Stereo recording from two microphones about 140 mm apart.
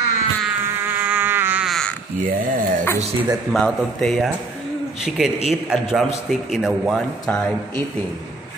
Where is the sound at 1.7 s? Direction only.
5° left (ahead or behind).